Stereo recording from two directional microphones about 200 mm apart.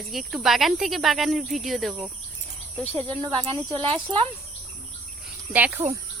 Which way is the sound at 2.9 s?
25° right (ahead or behind).